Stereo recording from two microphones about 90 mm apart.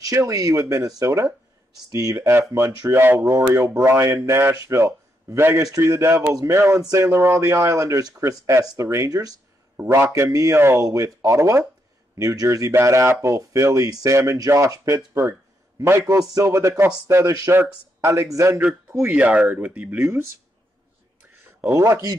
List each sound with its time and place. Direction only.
0.0 s a man's voice: 40° right (ahead or behind)
3.2 s a man's voice: 40° right (ahead or behind)
9.8 s a man's voice: 25° right (ahead or behind)
10.0 s a man's voice: 40° right (ahead or behind)
16.1 s a man's voice: 40° right (ahead or behind)
19.0 s speech: 15° right (ahead or behind)
20.0 s a man's voice: 30° right (ahead or behind)
21.6 s a man's voice: 30° right (ahead or behind)